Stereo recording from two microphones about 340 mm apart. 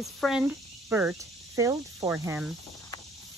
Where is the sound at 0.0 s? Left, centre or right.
Centre.